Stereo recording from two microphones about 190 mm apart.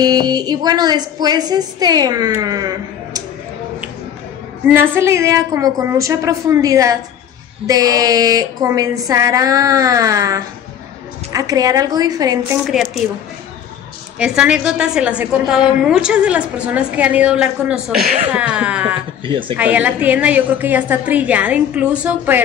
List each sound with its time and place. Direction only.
0.0 s a woman's voice: 20° right (ahead or behind)
4.6 s a woman's voice: 10° right (ahead or behind)
14.1 s a woman's voice: 5° right (ahead or behind)
19.2 s a woman's voice: 25° right (ahead or behind)
19.5 s a woman's voice: 10° right (ahead or behind)